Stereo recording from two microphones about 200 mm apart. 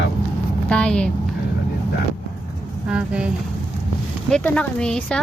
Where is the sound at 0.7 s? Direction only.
5° left (ahead or behind).